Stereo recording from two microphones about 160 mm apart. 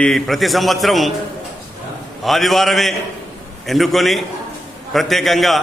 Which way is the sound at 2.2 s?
Centre (ahead or behind).